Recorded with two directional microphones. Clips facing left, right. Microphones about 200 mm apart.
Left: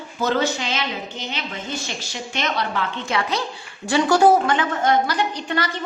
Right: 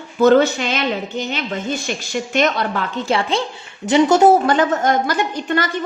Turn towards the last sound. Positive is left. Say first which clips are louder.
# right 4 dB
turn(degrees=-50)  # may be behind; listen again after turning